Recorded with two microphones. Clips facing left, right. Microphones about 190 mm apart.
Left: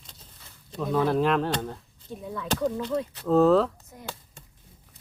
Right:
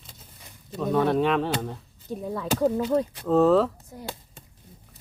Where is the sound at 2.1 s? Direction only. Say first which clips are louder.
Right 5 dB; 40° right (ahead or behind).